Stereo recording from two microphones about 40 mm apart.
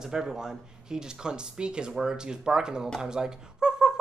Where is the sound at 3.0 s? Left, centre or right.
Centre.